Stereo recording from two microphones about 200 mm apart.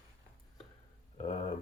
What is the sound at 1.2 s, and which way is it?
Speech, 35° left (ahead or behind).